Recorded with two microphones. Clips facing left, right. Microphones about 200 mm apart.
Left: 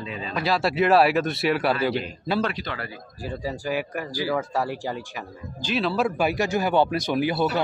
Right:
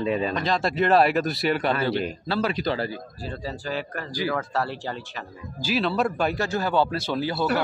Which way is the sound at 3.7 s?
10° left (ahead or behind).